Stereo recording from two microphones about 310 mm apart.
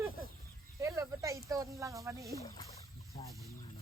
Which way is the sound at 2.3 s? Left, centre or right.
Centre.